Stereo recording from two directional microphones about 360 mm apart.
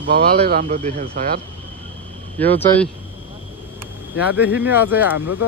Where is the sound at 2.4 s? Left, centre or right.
Centre.